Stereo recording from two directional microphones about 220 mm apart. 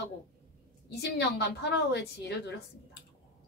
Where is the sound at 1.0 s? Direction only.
50° left (ahead or behind).